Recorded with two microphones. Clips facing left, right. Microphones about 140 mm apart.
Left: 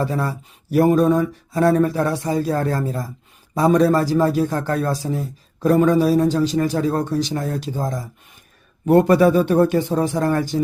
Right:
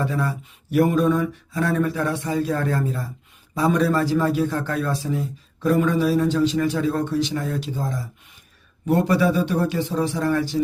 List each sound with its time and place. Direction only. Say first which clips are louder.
0.0 s a man's voice: left 2 dB; 40° left (ahead or behind)